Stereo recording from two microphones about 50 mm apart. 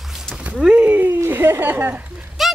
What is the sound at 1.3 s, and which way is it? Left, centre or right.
Speech, right.